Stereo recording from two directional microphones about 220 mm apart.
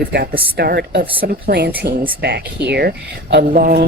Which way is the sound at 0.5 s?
45° right (ahead or behind).